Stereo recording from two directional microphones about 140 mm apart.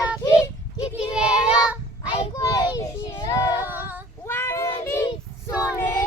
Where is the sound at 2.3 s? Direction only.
25° left (ahead or behind).